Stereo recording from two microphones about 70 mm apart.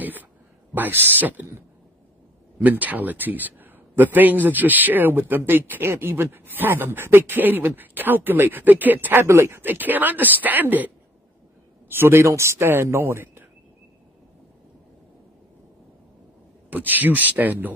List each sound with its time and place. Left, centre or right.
0.0 s a sound: right
0.7 s a man's voice: right
2.6 s a man's voice: right
11.9 s a man's voice: right
16.7 s a man's voice: right